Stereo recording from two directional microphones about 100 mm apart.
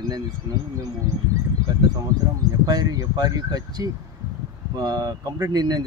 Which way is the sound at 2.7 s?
40° right (ahead or behind).